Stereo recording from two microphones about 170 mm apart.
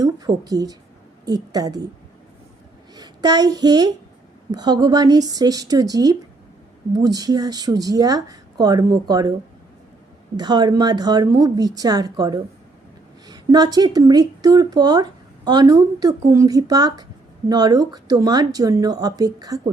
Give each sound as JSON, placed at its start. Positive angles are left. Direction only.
{"t": 0.0, "sound": "a woman's voice", "side_deg": -20}
{"t": 2.9, "sound": "a woman's voice", "side_deg": -25}
{"t": 10.3, "sound": "a woman's voice", "side_deg": -25}